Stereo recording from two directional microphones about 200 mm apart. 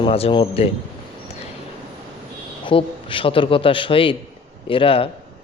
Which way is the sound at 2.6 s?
25° left (ahead or behind).